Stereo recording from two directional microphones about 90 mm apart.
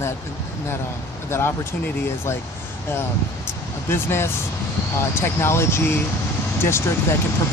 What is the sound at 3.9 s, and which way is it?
Speech, 25° left (ahead or behind).